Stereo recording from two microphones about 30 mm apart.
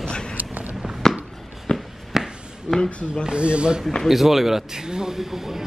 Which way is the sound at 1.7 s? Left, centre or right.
Left.